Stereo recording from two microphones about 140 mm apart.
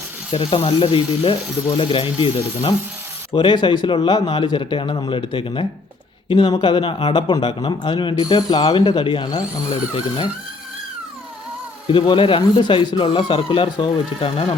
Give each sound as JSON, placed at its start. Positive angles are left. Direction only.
{"t": 0.3, "sound": "speech", "side_deg": 40}
{"t": 11.9, "sound": "speech", "side_deg": 35}